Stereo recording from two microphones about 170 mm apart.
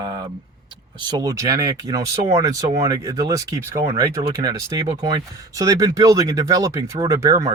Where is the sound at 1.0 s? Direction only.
25° right (ahead or behind).